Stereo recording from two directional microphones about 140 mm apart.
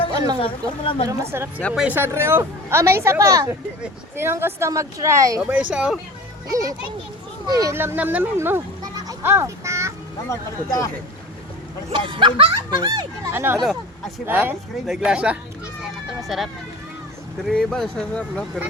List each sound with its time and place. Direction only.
0.4 s speech: 40° left (ahead or behind)
1.0 s a woman's voice: 20° right (ahead or behind)
5.5 s speech: 10° right (ahead or behind)
6.5 s a woman's voice: 25° right (ahead or behind)
10.2 s speech: 25° left (ahead or behind)
11.9 s speech: 35° right (ahead or behind)
12.8 s a woman's voice: 25° right (ahead or behind); by 15.4 s 5° right (ahead or behind)
15.8 s children playing: centre (ahead or behind)
17.5 s speech: 5° left (ahead or behind)